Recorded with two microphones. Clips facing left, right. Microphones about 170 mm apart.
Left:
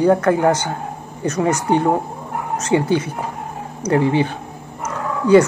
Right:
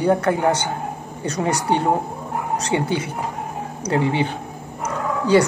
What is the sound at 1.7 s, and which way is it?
A woman's voice, 20° right (ahead or behind).